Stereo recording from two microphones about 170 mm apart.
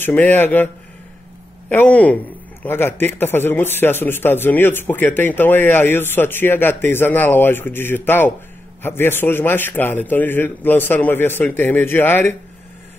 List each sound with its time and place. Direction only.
0.0 s speech: 10° left (ahead or behind)
1.7 s speech: 10° left (ahead or behind)